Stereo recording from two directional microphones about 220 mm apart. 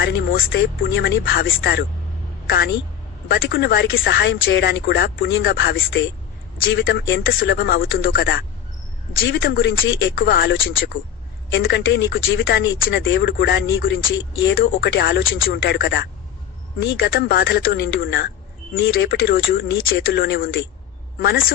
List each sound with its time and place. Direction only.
0.0 s speech: 45° left (ahead or behind)
3.2 s speech: 50° left (ahead or behind)
10.2 s speech: 45° left (ahead or behind)
10.9 s speech: 60° left (ahead or behind)
14.5 s speech: 40° left (ahead or behind)
18.8 s speech: 55° left (ahead or behind)